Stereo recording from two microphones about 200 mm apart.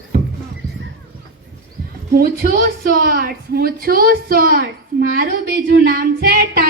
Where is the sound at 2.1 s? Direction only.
50° right (ahead or behind).